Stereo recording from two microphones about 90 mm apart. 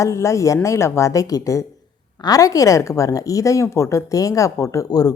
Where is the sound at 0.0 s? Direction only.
35° left (ahead or behind).